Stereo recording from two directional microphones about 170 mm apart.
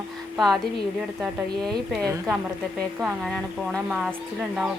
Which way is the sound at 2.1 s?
15° right (ahead or behind).